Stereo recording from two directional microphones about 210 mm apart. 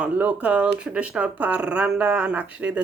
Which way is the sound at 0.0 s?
5° right (ahead or behind).